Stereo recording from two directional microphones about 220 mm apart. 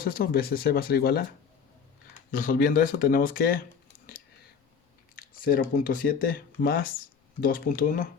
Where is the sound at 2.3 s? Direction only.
40° left (ahead or behind).